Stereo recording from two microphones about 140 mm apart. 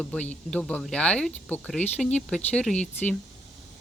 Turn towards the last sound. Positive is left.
turn(degrees=5)  # may be behind; listen again after turning